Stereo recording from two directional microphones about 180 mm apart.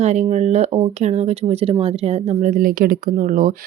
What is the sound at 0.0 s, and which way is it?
Speech, 40° right (ahead or behind).